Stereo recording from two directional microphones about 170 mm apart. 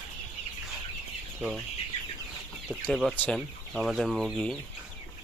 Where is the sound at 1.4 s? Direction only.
10° right (ahead or behind).